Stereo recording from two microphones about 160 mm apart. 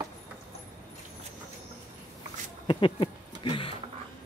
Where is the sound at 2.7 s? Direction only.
30° left (ahead or behind).